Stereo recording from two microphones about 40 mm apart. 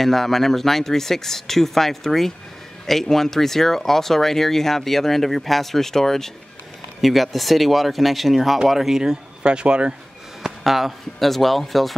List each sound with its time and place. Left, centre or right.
0.0 s speech: centre; by 9.9 s right
10.6 s speech: centre